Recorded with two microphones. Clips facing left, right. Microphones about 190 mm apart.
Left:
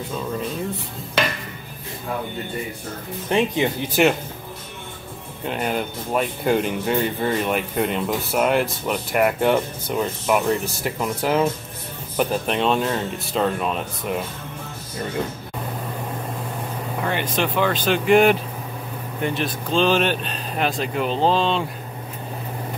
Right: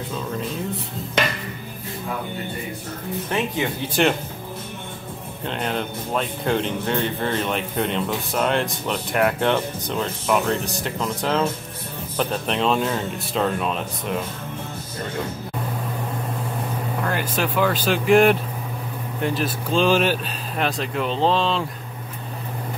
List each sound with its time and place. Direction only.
3.3 s speech: 20° left (ahead or behind)
4.0 s speech: 5° left (ahead or behind)
5.5 s speech: 10° left (ahead or behind)
17.0 s speech: centre (ahead or behind)